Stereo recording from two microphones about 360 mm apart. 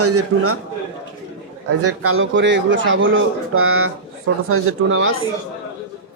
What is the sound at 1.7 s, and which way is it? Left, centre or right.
A man's voice, right.